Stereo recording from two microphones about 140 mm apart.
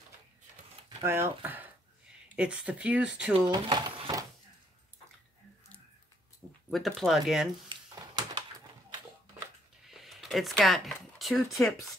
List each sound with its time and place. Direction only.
1.0 s speech: 20° right (ahead or behind)
3.4 s speech: 35° right (ahead or behind)
6.7 s speech: centre (ahead or behind)
7.7 s a sound: 35° right (ahead or behind)
9.8 s speech: centre (ahead or behind)